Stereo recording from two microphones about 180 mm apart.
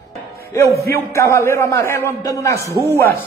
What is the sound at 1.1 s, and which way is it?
A man's voice, 15° left (ahead or behind).